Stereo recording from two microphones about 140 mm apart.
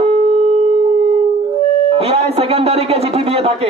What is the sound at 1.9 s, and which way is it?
A man's voice, 45° right (ahead or behind).